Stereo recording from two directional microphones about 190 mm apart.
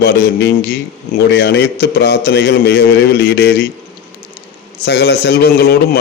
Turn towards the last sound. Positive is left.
turn(degrees=55)  # may be behind; listen again after turning